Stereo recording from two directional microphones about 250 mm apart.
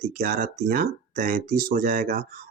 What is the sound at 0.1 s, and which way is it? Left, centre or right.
Speech, right.